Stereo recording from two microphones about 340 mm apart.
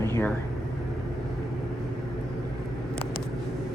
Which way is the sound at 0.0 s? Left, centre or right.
Centre.